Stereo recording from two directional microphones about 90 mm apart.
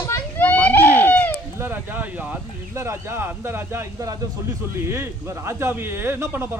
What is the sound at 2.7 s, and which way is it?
Speech, 30° right (ahead or behind).